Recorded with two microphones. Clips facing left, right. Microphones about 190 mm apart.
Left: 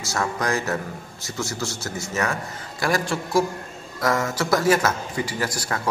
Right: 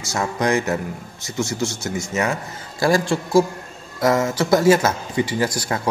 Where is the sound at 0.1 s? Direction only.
20° right (ahead or behind).